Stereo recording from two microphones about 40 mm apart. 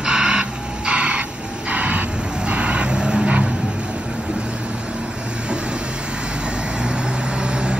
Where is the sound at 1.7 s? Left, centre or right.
Right.